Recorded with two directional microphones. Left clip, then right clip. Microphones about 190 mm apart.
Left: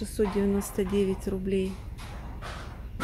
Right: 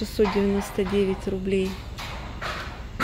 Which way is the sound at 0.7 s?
15° left (ahead or behind).